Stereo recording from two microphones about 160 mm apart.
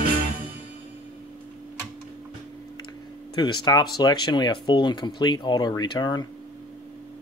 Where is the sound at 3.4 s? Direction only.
30° left (ahead or behind).